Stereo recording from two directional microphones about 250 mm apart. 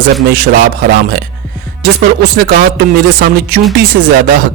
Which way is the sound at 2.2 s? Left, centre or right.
Right.